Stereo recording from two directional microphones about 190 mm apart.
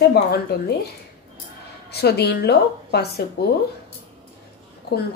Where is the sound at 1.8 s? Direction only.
60° left (ahead or behind).